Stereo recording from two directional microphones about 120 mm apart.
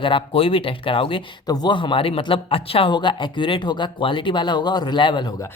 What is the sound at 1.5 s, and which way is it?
Speech, 35° left (ahead or behind).